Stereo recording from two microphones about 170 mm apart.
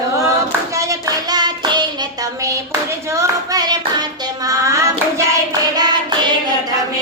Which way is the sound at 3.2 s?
20° right (ahead or behind).